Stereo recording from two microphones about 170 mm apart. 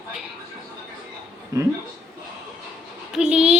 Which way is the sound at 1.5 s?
20° right (ahead or behind).